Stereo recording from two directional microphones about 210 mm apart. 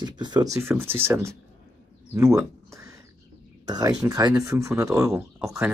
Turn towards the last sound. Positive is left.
turn(degrees=-10)  # may be behind; listen again after turning